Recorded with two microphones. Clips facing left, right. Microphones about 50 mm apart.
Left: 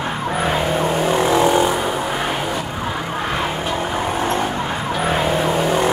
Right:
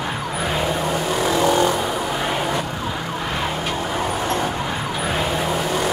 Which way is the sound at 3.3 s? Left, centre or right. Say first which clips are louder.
Left 1 dB; left.